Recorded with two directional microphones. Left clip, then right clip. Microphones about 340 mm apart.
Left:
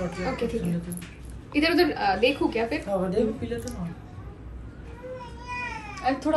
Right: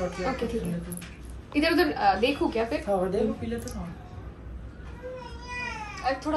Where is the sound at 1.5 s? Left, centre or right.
Centre.